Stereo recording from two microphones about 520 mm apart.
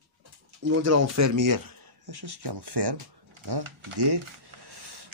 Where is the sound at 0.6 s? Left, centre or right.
Right.